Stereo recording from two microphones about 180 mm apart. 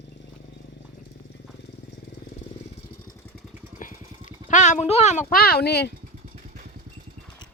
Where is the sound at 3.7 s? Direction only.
45° left (ahead or behind).